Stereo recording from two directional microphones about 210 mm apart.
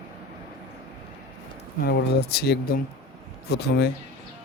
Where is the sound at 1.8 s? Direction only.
50° left (ahead or behind).